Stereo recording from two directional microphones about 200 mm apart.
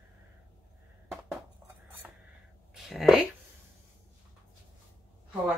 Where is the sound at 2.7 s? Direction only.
Centre (ahead or behind).